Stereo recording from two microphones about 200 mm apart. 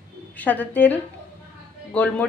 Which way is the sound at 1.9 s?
5° left (ahead or behind).